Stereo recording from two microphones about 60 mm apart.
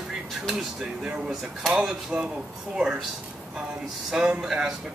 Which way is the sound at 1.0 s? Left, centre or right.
Centre.